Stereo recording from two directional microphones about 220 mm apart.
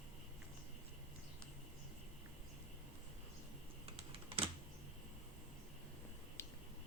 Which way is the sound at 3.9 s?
25° right (ahead or behind).